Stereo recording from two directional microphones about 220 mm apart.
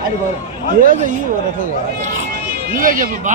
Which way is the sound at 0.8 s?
35° right (ahead or behind).